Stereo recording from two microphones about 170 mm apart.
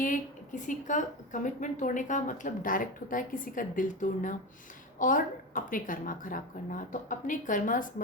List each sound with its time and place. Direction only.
0.0 s a woman's voice: 50° left (ahead or behind)